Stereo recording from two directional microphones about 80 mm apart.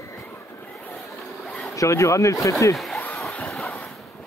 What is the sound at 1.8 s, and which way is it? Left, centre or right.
Speech, left.